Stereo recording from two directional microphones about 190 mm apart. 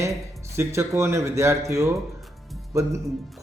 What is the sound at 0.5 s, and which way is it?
Speech, 15° right (ahead or behind).